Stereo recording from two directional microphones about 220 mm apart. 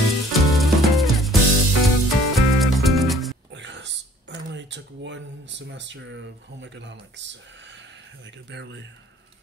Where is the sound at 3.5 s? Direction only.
55° right (ahead or behind).